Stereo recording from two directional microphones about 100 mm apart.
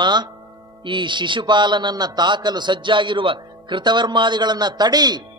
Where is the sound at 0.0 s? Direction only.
45° right (ahead or behind).